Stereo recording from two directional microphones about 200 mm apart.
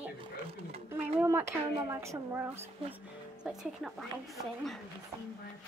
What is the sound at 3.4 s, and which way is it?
A woman's voice, 5° right (ahead or behind).